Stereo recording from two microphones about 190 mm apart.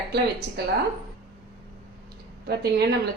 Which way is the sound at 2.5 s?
55° right (ahead or behind).